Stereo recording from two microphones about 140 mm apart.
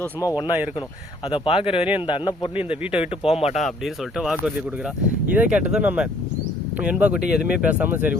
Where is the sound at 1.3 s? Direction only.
40° left (ahead or behind).